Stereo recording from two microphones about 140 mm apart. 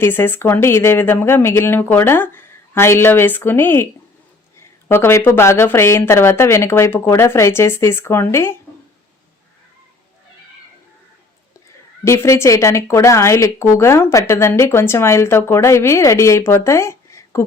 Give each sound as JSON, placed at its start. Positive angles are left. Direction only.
{"t": 0.0, "sound": "speech", "side_deg": 15}
{"t": 4.9, "sound": "speech", "side_deg": 15}
{"t": 12.0, "sound": "a woman's voice", "side_deg": 20}